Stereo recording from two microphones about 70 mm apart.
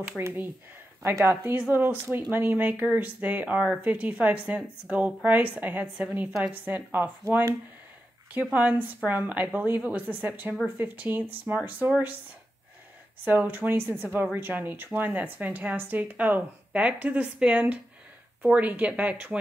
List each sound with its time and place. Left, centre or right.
1.0 s a woman's voice: right
1.3 s a woman's voice: right
8.5 s a woman's voice: right
13.2 s a woman's voice: right